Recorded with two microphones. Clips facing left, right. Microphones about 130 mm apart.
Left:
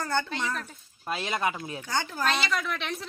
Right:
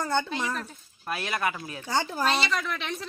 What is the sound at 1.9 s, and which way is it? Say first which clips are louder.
Speech: right 4 dB; 30° right (ahead or behind).